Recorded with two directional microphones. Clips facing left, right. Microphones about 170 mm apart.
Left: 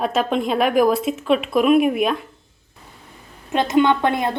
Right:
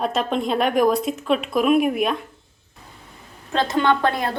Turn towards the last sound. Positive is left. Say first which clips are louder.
# left 2 dB
turn(degrees=20)  # may be behind; listen again after turning